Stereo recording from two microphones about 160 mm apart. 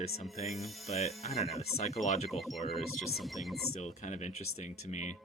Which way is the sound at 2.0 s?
45° left (ahead or behind).